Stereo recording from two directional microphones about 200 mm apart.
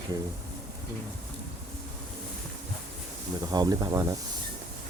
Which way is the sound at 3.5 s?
20° right (ahead or behind).